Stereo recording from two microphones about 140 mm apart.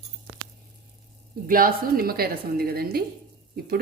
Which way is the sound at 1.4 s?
90° right.